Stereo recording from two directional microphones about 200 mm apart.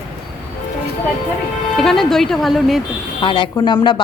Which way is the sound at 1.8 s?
Centre (ahead or behind).